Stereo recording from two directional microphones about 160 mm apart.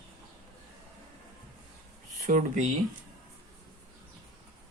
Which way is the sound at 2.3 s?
55° right (ahead or behind).